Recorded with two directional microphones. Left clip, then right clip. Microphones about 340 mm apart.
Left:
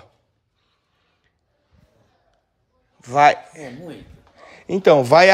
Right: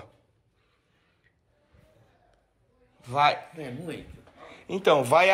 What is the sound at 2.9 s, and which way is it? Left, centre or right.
Speech, left.